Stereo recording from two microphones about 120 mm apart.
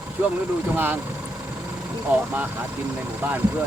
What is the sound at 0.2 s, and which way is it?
Speech, 20° right (ahead or behind).